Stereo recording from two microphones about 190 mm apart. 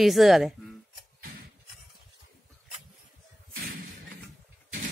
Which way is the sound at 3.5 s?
55° right (ahead or behind).